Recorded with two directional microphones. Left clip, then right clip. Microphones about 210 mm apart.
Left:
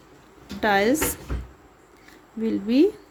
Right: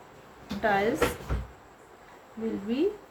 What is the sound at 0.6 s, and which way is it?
Speech, 50° left (ahead or behind).